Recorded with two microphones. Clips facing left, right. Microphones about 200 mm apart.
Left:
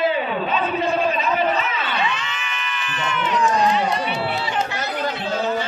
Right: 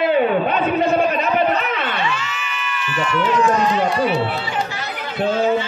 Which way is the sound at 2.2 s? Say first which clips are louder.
Right 2 dB; 5° right (ahead or behind).